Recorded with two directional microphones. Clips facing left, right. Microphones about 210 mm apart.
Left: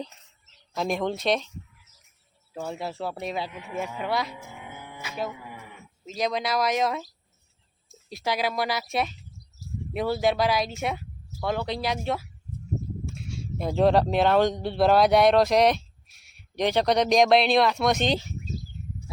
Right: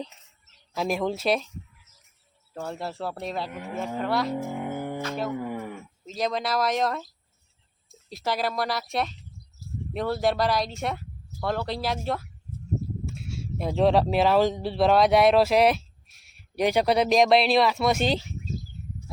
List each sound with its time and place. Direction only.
0.7 s speech: 5° right (ahead or behind)
2.5 s speech: 5° left (ahead or behind)
4.3 s music: 50° right (ahead or behind)
5.3 s a sound: 50° right (ahead or behind)
6.1 s speech: centre (ahead or behind)
8.1 s speech: centre (ahead or behind)